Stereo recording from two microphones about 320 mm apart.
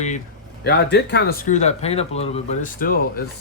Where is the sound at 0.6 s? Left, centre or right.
Left.